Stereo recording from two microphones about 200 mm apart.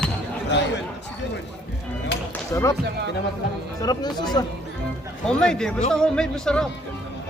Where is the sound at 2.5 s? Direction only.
15° left (ahead or behind).